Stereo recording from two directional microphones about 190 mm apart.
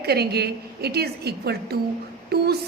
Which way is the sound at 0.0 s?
55° right (ahead or behind).